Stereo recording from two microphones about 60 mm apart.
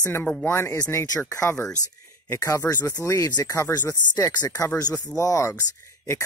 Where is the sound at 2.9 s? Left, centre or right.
Left.